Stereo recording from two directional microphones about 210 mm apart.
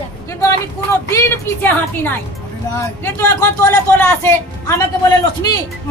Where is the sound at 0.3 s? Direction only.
15° left (ahead or behind).